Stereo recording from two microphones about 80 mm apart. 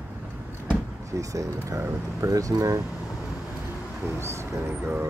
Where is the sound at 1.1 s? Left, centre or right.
Right.